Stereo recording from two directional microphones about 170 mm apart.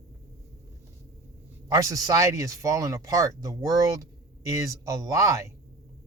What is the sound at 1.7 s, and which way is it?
Speech, 20° right (ahead or behind).